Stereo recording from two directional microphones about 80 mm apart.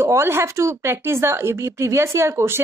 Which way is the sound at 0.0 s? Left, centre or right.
Right.